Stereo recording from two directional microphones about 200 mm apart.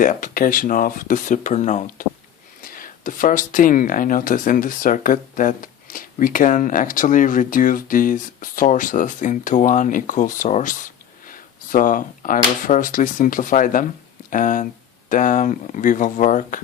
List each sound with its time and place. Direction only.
0.0 s speech: 40° left (ahead or behind)